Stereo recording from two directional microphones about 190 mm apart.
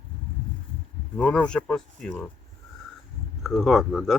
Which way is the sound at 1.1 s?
5° left (ahead or behind).